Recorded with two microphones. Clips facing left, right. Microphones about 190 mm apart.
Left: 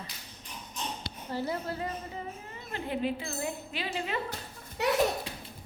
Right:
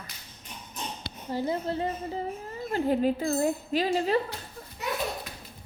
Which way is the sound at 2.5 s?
40° right (ahead or behind).